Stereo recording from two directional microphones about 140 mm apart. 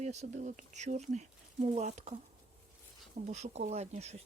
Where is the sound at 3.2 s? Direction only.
55° right (ahead or behind).